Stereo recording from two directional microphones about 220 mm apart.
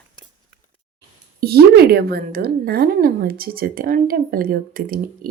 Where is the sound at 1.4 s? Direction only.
45° right (ahead or behind).